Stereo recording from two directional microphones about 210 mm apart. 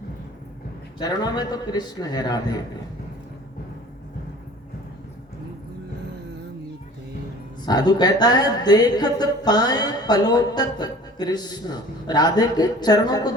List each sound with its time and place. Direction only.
0.9 s a woman's voice: 20° left (ahead or behind)
7.6 s a woman's voice: 20° left (ahead or behind)